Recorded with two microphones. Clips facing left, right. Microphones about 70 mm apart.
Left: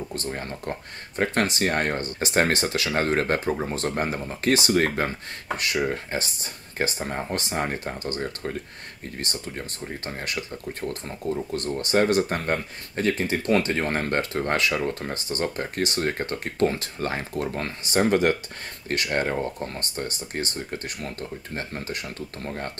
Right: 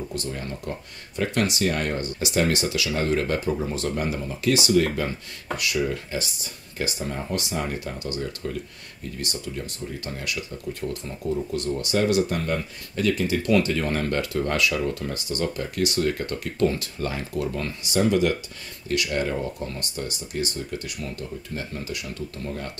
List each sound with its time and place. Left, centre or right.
0.1 s speech: left